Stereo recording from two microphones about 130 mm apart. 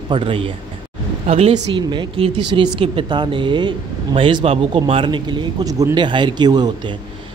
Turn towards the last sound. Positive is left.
turn(degrees=-30)  # may be behind; listen again after turning